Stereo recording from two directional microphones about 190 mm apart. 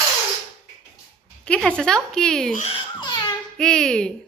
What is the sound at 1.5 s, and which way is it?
A woman's voice, 5° left (ahead or behind).